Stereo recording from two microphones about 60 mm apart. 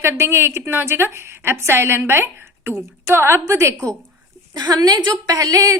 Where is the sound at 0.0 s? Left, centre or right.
Right.